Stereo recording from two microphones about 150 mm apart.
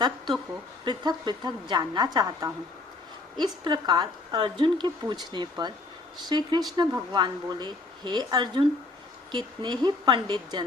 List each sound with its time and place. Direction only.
0.9 s a woman's voice: 30° right (ahead or behind)